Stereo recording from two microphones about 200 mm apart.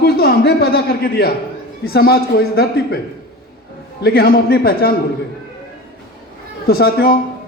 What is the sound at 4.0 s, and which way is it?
Speech, 50° left (ahead or behind).